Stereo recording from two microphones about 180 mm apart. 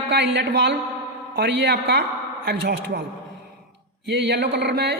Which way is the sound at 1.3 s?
65° right (ahead or behind).